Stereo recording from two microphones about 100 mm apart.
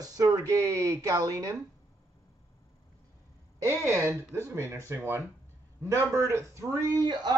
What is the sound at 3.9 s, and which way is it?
Speech, 30° right (ahead or behind).